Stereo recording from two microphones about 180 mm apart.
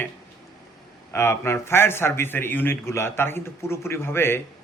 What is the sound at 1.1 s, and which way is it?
A man's voice, 15° left (ahead or behind).